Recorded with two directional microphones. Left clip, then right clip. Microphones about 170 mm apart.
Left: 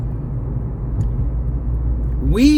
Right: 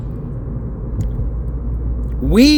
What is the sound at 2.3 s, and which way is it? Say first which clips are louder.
Speech: right 3 dB; 50° right (ahead or behind).